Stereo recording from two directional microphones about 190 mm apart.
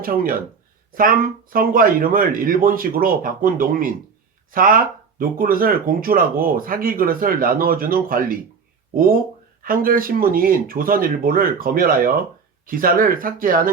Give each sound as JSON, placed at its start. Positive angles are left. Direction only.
{"t": 0.0, "sound": "speech", "side_deg": -50}
{"t": 9.6, "sound": "speech", "side_deg": -50}